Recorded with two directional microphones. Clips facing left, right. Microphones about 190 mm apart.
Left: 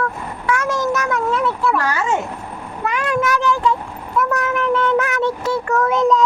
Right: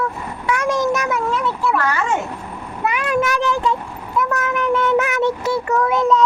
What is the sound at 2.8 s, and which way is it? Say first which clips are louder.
Speech: right 1 dB; 10° right (ahead or behind).